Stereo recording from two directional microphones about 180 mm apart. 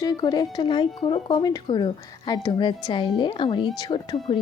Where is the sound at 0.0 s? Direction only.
25° left (ahead or behind).